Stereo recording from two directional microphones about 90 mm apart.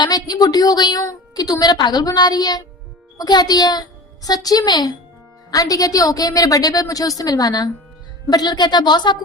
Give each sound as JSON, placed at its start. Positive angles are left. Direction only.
{"t": 0.0, "sound": "a woman's voice", "side_deg": 50}